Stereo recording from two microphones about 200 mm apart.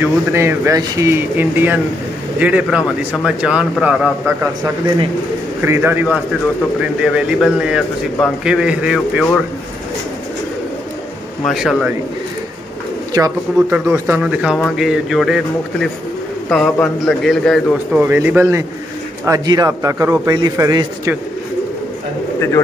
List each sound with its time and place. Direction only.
0.0 s a man's voice: 10° right (ahead or behind)
11.4 s a man's voice: 5° right (ahead or behind)
13.1 s a man's voice: 15° right (ahead or behind); by 17.6 s centre (ahead or behind)
17.9 s a man's voice: 10° right (ahead or behind)